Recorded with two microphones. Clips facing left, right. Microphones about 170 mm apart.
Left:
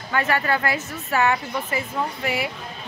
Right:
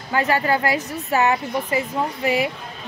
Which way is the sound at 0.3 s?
15° right (ahead or behind).